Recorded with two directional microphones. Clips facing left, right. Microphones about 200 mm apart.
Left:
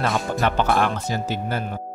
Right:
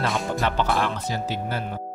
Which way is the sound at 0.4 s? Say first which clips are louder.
Left 4 dB; 55° left (ahead or behind).